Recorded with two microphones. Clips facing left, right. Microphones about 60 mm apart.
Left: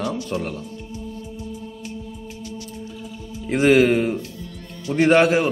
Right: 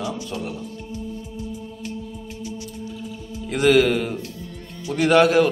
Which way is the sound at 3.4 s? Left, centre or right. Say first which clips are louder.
Left 1 dB; left.